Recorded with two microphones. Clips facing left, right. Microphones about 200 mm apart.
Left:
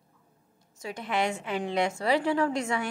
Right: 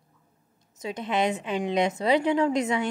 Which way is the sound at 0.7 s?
20° right (ahead or behind).